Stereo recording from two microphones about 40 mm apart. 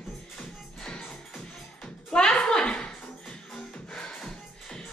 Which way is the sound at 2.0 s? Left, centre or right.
Centre.